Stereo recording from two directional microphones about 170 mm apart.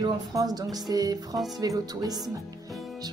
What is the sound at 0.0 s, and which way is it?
Speech, 20° right (ahead or behind).